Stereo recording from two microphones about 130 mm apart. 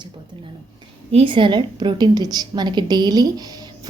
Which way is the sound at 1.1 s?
40° right (ahead or behind).